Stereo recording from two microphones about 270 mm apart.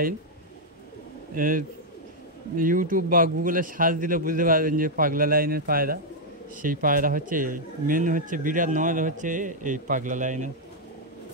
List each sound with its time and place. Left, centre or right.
1.3 s a man's voice: right